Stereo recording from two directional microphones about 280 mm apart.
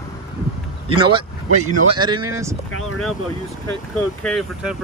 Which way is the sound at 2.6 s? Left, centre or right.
Left.